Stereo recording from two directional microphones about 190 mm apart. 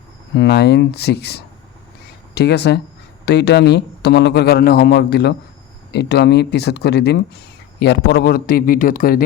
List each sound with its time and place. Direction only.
0.3 s a man's voice: 60° left (ahead or behind)